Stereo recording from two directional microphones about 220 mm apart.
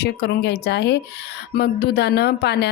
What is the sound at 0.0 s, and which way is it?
A woman's voice, 50° left (ahead or behind).